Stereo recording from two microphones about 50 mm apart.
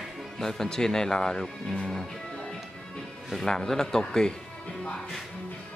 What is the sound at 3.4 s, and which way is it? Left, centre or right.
Speech, centre.